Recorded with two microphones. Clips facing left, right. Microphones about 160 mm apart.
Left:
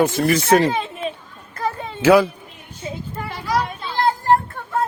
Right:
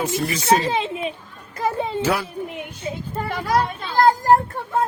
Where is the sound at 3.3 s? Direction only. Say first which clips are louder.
Right 2 dB; 55° right (ahead or behind).